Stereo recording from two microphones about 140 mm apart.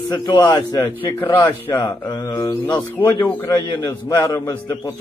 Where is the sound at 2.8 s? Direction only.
10° left (ahead or behind).